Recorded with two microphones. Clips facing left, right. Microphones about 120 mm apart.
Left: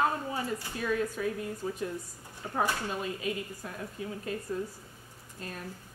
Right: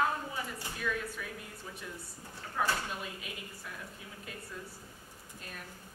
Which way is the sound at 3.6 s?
35° left (ahead or behind).